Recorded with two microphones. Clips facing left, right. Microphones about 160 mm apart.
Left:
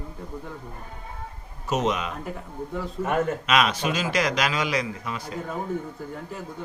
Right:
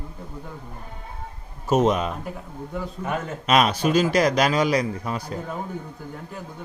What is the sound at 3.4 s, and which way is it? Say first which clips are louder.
A man's voice: right 3 dB; 40° right (ahead or behind).